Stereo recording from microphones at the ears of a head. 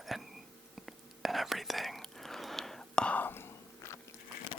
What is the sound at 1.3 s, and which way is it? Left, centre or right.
Whispering, centre.